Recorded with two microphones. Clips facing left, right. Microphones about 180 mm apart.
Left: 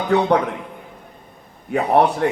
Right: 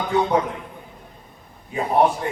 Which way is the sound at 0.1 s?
65° left (ahead or behind).